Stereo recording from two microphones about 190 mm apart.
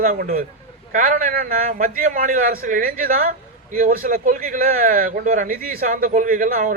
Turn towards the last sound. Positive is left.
turn(degrees=-45)  # may be behind; listen again after turning